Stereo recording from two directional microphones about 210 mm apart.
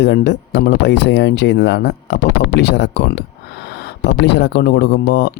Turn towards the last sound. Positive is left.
turn(degrees=50)  # may be behind; listen again after turning